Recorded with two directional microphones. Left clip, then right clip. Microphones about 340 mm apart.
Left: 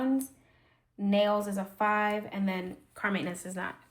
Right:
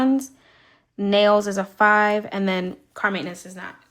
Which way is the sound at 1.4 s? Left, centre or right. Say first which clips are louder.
Right 12 dB; centre.